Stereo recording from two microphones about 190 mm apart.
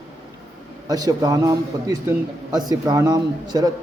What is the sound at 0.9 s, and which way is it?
A man's voice, 20° right (ahead or behind).